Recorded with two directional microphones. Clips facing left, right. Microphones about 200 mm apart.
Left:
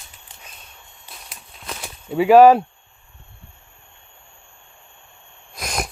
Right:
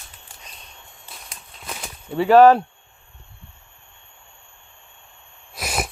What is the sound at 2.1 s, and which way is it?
Speech, 10° left (ahead or behind).